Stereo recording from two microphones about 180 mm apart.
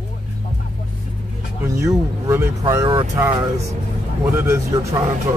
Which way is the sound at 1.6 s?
15° right (ahead or behind).